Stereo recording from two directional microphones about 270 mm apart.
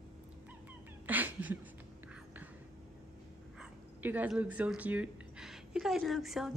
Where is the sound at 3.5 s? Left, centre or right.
Centre.